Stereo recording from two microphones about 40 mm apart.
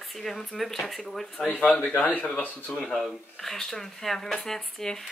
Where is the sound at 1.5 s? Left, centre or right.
Left.